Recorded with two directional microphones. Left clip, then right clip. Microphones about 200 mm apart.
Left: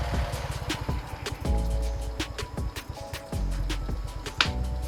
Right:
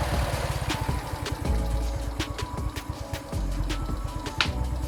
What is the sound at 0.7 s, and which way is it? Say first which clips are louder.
Vehicle: right 1 dB; centre (ahead or behind).